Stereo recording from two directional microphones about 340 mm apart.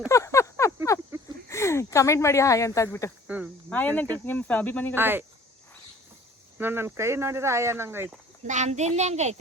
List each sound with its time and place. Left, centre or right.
0.1 s a sound: centre
1.5 s speech: centre
3.2 s speech: centre
4.9 s speech: centre
6.6 s speech: centre
8.4 s a child's voice: right